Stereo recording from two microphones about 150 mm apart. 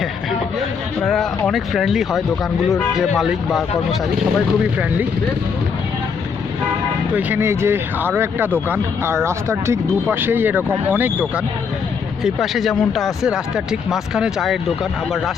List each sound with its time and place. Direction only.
1.0 s speech: 5° left (ahead or behind)
4.6 s speech: 10° right (ahead or behind)
7.1 s speech: 10° right (ahead or behind)
12.2 s speech: centre (ahead or behind)